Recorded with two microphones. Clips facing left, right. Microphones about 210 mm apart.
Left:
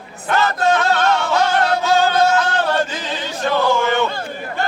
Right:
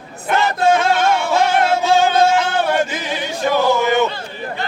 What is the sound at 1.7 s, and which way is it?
Music, 25° right (ahead or behind).